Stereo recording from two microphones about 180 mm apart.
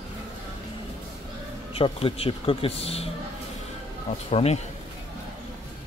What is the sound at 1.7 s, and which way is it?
Speech, 30° left (ahead or behind).